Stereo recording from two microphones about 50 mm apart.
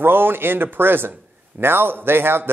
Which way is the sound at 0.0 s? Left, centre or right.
Right.